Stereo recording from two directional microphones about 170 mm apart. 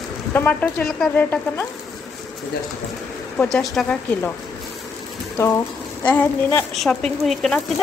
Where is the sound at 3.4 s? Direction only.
5° left (ahead or behind).